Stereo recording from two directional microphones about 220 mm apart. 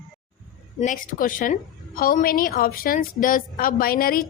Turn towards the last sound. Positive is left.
turn(degrees=40)  # may be behind; listen again after turning